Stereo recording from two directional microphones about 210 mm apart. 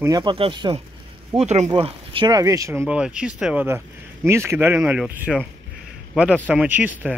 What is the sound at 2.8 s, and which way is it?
Speech, 5° right (ahead or behind).